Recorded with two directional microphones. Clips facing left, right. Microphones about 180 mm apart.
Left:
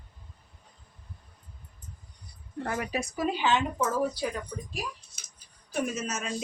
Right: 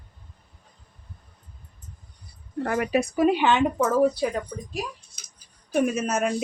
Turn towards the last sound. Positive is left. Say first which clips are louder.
# right 9 dB
turn(degrees=-60)  # may be behind; listen again after turning